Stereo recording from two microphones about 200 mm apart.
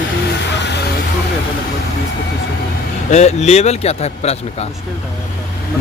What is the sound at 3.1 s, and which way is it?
A man's voice, 35° left (ahead or behind).